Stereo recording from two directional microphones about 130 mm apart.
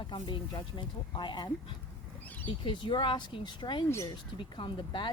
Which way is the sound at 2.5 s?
35° left (ahead or behind).